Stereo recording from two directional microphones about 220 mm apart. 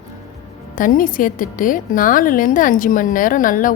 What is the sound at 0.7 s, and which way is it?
A woman's voice, 40° left (ahead or behind).